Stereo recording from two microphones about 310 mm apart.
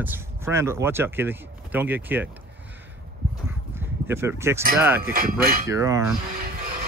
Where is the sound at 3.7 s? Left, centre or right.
Centre.